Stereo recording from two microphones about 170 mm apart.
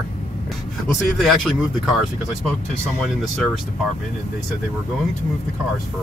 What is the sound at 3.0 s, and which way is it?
Speech, centre (ahead or behind).